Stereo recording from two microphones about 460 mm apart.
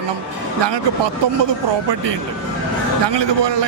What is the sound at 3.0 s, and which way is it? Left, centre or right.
Speech, right.